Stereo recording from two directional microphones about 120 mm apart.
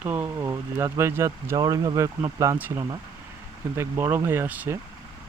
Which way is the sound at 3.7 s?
20° right (ahead or behind).